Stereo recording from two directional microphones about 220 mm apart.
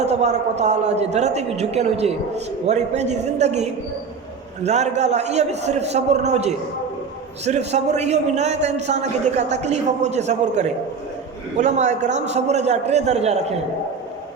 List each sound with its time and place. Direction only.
0.0 s a man's voice: 30° right (ahead or behind)